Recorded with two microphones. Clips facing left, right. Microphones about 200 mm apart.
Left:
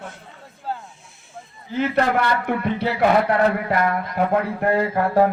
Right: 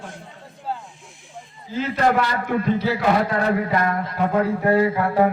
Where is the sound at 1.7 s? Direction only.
65° left (ahead or behind).